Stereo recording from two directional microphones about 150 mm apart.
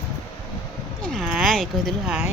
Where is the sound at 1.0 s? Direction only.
Centre (ahead or behind).